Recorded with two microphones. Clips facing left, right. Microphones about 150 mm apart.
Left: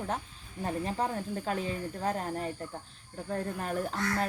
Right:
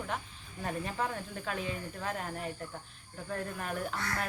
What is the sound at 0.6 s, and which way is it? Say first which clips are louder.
Speech: left 3 dB; 35° left (ahead or behind).